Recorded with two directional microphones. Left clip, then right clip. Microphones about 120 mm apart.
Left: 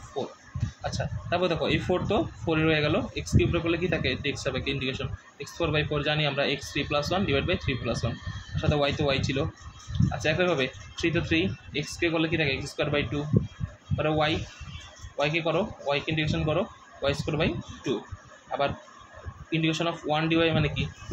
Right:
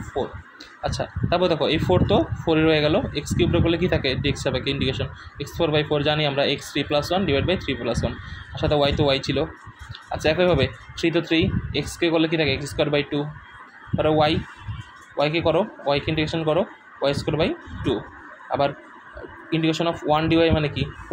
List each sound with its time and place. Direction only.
0.8 s speech: 45° right (ahead or behind)
19.5 s speech: 40° right (ahead or behind)